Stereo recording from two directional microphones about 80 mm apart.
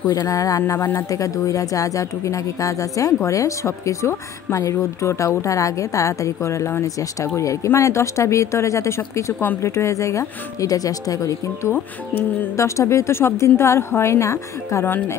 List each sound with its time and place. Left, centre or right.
0.1 s speech: left
1.1 s speech: left
11.7 s speech: left